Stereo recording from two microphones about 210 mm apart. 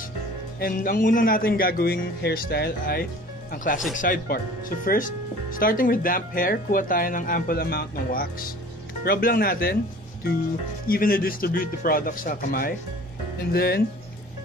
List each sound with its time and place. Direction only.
0.6 s speech: 45° left (ahead or behind)
10.9 s speech: 45° left (ahead or behind)